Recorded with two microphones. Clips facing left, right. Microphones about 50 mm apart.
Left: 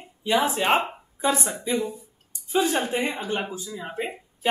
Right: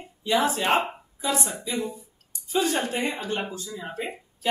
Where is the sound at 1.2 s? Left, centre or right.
Left.